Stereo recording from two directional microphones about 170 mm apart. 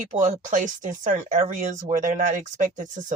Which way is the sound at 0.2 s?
50° right (ahead or behind).